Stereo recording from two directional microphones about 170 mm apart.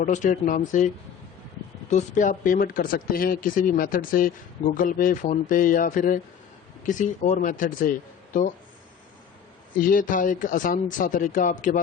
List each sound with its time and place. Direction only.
0.0 s speech: 50° left (ahead or behind)
1.9 s speech: 45° left (ahead or behind)
9.7 s speech: 55° left (ahead or behind)